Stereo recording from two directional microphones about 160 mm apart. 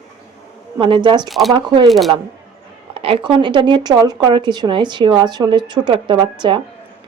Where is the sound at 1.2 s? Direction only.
Centre (ahead or behind).